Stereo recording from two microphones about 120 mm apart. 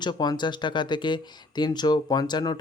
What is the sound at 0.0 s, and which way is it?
Speech, 35° left (ahead or behind).